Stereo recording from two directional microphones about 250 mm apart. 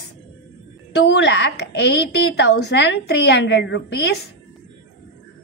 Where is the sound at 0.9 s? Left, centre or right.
Left.